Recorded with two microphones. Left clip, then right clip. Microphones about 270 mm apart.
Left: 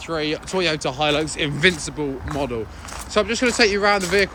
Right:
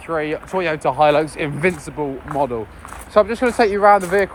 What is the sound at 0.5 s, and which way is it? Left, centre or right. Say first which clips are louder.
Speech: right 1 dB; centre.